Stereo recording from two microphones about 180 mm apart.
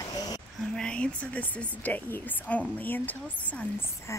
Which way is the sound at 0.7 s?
5° left (ahead or behind).